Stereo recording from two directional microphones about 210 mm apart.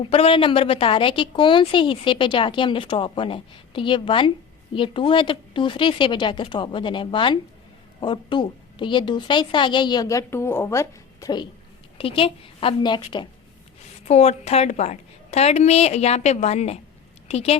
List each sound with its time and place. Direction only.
0.1 s a woman's voice: 25° left (ahead or behind)